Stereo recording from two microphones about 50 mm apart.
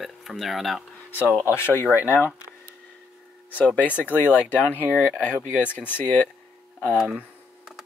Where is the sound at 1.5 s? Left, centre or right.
Left.